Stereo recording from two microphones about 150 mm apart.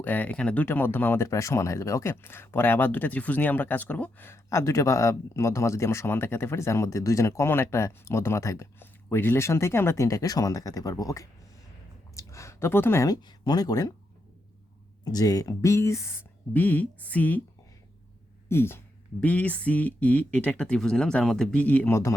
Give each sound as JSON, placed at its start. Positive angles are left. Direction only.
{"t": 0.0, "sound": "speech", "side_deg": 10}
{"t": 15.0, "sound": "speech", "side_deg": 25}
{"t": 18.4, "sound": "speech", "side_deg": 15}